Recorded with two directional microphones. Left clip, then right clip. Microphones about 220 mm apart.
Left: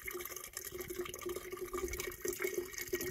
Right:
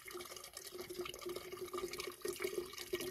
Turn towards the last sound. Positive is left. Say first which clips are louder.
# left 3 dB
turn(degrees=35)  # may be behind; listen again after turning